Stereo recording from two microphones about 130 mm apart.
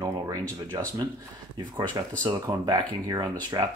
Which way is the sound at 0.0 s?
25° right (ahead or behind).